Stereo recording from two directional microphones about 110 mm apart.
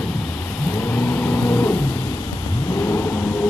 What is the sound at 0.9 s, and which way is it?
Vehicle, 15° left (ahead or behind).